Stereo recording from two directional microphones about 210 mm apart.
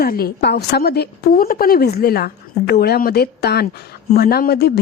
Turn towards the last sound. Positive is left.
turn(degrees=50)  # may be behind; listen again after turning